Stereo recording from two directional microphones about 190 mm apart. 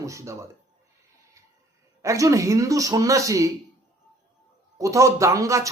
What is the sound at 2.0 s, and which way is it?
Speech, 15° right (ahead or behind).